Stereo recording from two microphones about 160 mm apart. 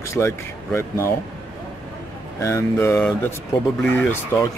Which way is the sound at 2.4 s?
20° left (ahead or behind).